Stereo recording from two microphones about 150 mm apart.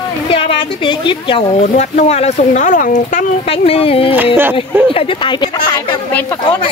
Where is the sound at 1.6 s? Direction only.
50° left (ahead or behind).